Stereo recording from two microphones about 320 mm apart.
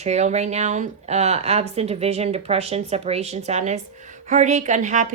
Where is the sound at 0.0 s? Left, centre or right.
Right.